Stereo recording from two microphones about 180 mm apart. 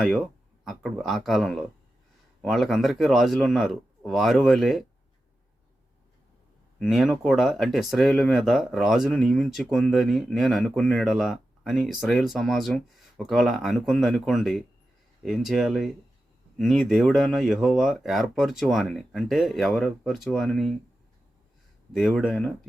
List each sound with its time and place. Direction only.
0.6 s speech: centre (ahead or behind)
6.7 s speech: centre (ahead or behind)
21.9 s speech: centre (ahead or behind)